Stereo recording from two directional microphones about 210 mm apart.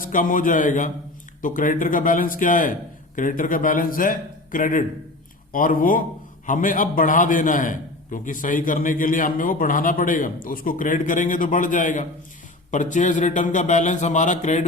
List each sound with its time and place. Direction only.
0.0 s a man's voice: 40° left (ahead or behind)